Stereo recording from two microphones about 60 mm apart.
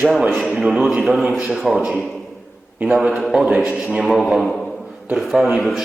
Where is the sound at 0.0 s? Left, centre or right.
Centre.